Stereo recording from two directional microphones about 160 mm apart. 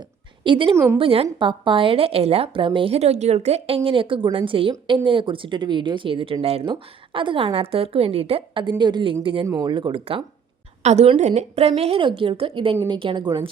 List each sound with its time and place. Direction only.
0.4 s a woman's voice: 30° right (ahead or behind)
10.8 s a woman's voice: 45° right (ahead or behind); by 13.5 s 25° right (ahead or behind)